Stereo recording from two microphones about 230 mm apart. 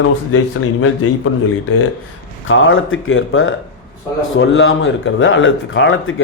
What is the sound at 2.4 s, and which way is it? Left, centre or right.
Speech, left.